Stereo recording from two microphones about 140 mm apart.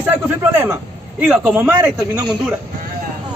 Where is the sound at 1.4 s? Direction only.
15° right (ahead or behind).